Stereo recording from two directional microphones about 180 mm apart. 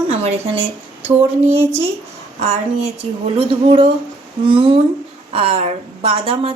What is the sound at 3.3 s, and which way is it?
A woman's voice, 30° right (ahead or behind).